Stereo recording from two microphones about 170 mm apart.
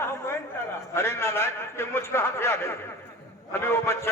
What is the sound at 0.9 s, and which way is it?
A man's voice, 15° left (ahead or behind).